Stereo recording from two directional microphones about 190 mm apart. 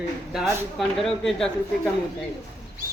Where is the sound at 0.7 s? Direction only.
Centre (ahead or behind).